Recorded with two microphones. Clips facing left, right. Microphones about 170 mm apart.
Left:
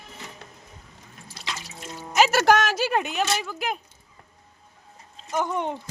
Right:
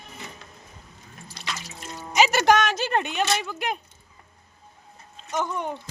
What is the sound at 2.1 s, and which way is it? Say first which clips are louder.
Speech: even; 5° left (ahead or behind).